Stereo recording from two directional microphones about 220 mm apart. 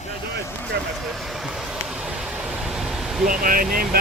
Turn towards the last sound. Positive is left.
turn(degrees=-40)  # may be behind; listen again after turning